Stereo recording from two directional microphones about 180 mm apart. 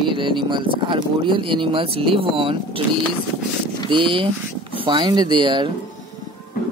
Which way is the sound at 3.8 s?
30° right (ahead or behind).